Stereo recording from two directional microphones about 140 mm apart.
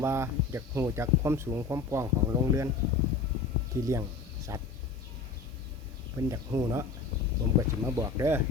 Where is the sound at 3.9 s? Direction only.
20° right (ahead or behind).